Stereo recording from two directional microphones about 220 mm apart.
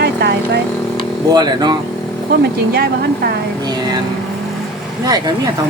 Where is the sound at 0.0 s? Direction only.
45° right (ahead or behind).